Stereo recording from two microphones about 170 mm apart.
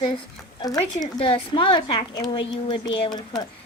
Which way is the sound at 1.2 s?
30° left (ahead or behind).